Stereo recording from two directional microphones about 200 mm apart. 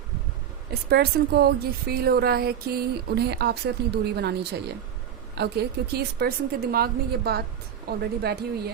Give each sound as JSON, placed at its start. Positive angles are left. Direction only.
{"t": 0.7, "sound": "speech", "side_deg": -55}